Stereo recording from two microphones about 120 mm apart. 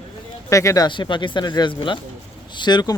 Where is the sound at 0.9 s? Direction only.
40° left (ahead or behind).